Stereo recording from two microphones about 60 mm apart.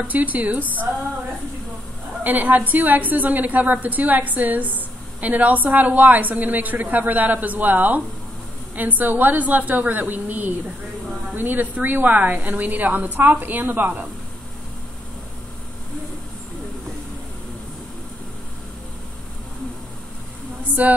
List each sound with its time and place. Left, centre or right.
0.0 s a woman's voice: right
2.2 s a woman's voice: right
20.8 s a woman's voice: right